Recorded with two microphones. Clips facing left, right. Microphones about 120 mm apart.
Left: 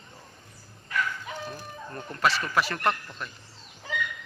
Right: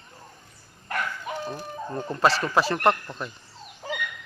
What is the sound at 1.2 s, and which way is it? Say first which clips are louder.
Speech: right 5 dB; 30° right (ahead or behind).